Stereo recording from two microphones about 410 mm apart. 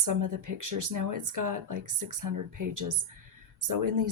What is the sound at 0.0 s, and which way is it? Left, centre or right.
Speech, right.